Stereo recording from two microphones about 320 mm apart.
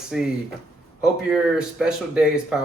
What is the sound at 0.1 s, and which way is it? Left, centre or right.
Speech, centre.